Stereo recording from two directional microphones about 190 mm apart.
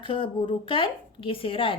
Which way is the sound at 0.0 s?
25° left (ahead or behind).